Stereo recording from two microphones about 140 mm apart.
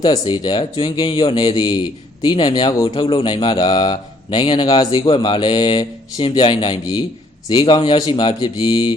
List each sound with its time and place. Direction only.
0.0 s speech: 30° left (ahead or behind)